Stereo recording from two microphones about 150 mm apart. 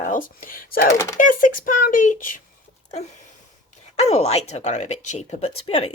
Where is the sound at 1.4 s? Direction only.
65° left (ahead or behind).